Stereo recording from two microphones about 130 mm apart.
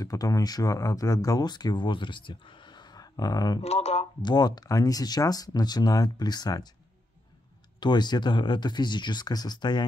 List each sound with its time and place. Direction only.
0.0 s speech: 25° left (ahead or behind)
3.6 s speech: 55° left (ahead or behind)
4.2 s speech: 35° left (ahead or behind)
7.8 s speech: 35° left (ahead or behind)